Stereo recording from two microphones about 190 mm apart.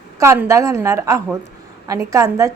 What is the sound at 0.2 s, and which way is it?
A woman's voice, 15° right (ahead or behind).